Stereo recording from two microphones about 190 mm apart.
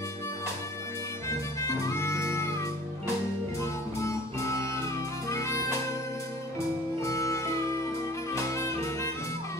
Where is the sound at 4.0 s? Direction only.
15° left (ahead or behind).